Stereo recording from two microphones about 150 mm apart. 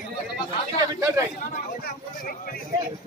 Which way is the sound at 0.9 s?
20° right (ahead or behind).